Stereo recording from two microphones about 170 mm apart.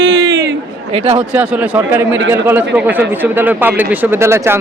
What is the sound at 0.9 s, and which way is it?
Speech, 35° right (ahead or behind).